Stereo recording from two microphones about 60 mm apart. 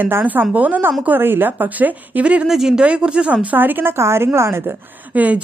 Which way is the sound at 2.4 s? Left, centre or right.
Centre.